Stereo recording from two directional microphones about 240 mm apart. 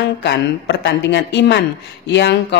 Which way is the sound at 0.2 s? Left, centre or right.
Left.